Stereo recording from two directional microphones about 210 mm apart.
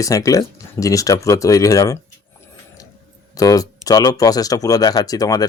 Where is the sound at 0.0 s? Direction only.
15° left (ahead or behind).